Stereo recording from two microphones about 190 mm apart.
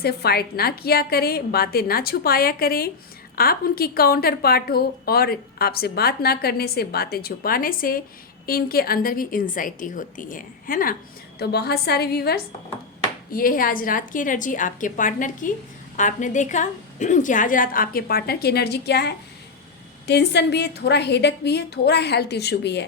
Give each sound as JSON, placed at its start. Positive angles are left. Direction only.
{"t": 0.0, "sound": "a woman's voice", "side_deg": 55}